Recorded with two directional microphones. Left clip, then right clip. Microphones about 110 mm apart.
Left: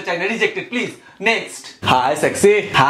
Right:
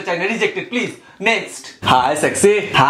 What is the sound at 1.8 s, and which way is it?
Speech, centre (ahead or behind).